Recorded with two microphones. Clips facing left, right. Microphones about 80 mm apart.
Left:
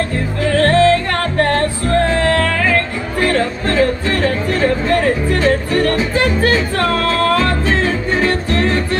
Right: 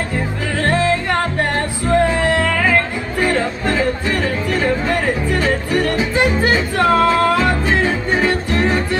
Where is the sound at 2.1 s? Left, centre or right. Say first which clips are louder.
Left 1 dB; centre.